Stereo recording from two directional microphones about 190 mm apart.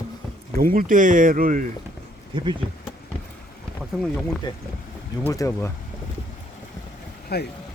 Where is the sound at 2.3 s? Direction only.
25° right (ahead or behind).